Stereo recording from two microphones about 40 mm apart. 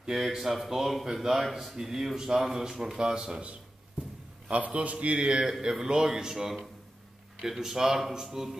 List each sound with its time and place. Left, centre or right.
0.0 s a man's voice: centre
4.5 s a man's voice: right
5.5 s a man's voice: centre